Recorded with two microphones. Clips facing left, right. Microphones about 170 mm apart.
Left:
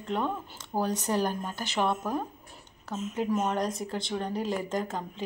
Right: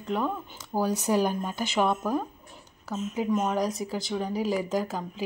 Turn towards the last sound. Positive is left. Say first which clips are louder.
# right 3 dB
turn(degrees=-5)  # may be behind; listen again after turning